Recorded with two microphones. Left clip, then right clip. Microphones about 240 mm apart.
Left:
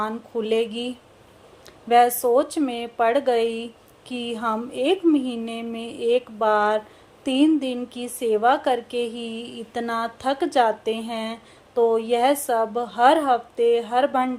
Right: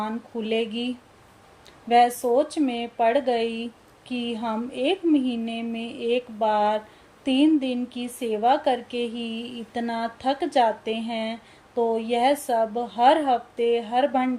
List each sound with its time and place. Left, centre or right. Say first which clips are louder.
0.4 s a woman's voice: left 2 dB; centre
11.7 s speech: left 4 dB; left
11.9 s a woman's voice: left 2 dB; centre
12.5 s a woman's voice: left 1 dB; left
12.9 s a woman's voice: left 2 dB; centre